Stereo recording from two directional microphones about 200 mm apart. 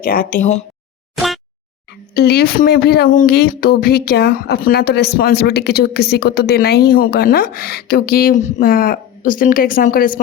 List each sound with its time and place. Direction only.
0.0 s speech: 45° left (ahead or behind)
2.1 s speech: 50° left (ahead or behind)